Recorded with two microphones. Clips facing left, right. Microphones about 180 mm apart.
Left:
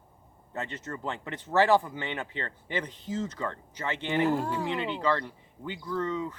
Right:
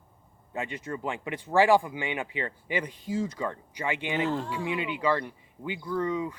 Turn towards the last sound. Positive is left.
turn(degrees=-10)  # may be behind; listen again after turning